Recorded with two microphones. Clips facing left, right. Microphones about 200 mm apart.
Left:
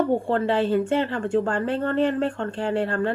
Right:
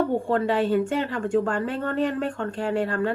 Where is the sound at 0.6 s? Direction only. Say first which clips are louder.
Left 1 dB; centre (ahead or behind).